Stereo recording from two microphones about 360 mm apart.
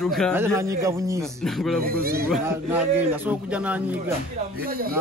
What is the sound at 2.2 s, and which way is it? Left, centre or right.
A man's voice, centre.